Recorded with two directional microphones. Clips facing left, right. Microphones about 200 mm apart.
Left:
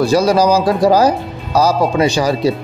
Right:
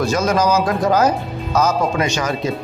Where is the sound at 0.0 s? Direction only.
35° left (ahead or behind).